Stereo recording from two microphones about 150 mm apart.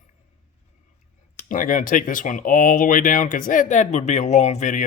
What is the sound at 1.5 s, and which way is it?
Speech, 60° left (ahead or behind).